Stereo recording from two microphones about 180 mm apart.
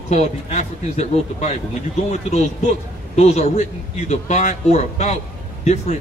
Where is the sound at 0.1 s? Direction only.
40° left (ahead or behind).